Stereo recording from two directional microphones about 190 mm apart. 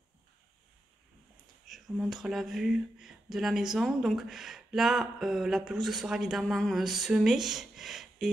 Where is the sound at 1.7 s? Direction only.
Centre (ahead or behind).